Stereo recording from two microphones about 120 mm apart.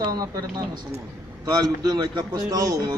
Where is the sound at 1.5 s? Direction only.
35° right (ahead or behind).